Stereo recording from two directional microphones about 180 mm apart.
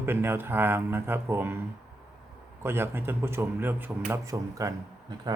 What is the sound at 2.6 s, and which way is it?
Speech, 10° right (ahead or behind).